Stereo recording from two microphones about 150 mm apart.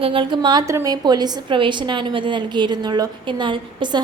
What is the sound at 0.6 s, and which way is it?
A woman's voice, 20° right (ahead or behind).